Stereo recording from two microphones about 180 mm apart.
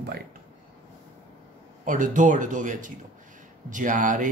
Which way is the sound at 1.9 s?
45° right (ahead or behind).